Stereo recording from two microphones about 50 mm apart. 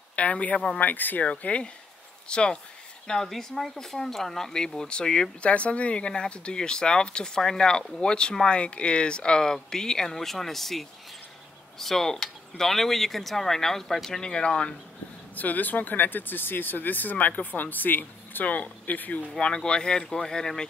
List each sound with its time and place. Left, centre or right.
0.1 s speech: left
0.7 s speech: left
1.2 s speech: left
3.1 s speech: centre
5.5 s speech: left; by 14.2 s centre
14.2 s speech: centre
15.3 s speech: left
19.3 s speech: centre